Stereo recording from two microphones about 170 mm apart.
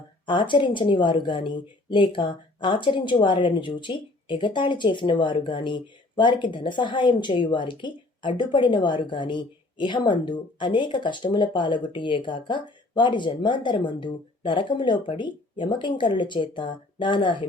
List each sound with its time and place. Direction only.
0.3 s a woman's voice: 30° left (ahead or behind)